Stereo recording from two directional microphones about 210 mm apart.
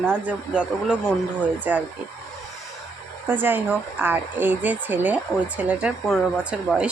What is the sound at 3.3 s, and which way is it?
Speech, 10° right (ahead or behind).